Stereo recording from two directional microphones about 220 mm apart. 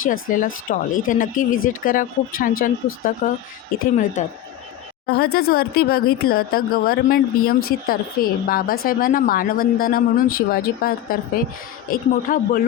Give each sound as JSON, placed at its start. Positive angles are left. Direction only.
{"t": 0.1, "sound": "a woman's voice", "side_deg": 40}
{"t": 1.5, "sound": "speech", "side_deg": 65}
{"t": 1.8, "sound": "a woman's voice", "side_deg": 40}
{"t": 5.1, "sound": "a woman's voice", "side_deg": 45}